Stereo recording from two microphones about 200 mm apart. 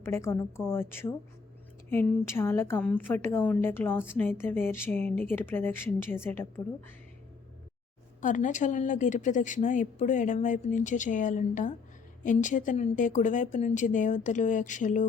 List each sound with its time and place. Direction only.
0.0 s a woman's voice: 15° left (ahead or behind)
8.2 s a woman's voice: 40° left (ahead or behind)